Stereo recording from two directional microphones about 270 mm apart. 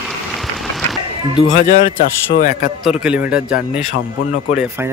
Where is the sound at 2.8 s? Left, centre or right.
Centre.